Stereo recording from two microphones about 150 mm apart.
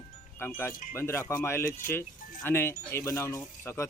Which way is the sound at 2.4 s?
15° left (ahead or behind).